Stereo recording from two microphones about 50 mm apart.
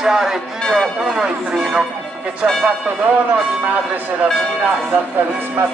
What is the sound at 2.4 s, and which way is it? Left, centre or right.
Speech, right.